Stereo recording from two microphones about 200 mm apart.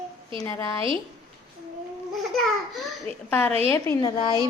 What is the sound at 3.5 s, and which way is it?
Speech, 30° right (ahead or behind).